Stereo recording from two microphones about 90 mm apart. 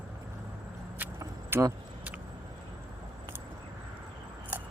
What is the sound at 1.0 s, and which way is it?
Vehicle, 15° right (ahead or behind).